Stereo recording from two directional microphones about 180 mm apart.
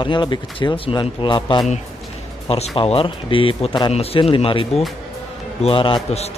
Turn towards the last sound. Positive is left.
turn(degrees=30)  # may be behind; listen again after turning